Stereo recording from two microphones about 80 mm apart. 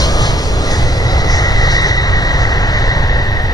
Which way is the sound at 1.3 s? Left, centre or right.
Left.